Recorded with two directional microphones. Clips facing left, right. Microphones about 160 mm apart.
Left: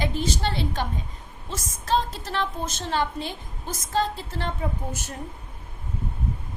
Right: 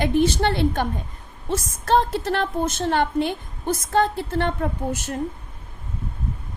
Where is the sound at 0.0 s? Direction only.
60° right (ahead or behind).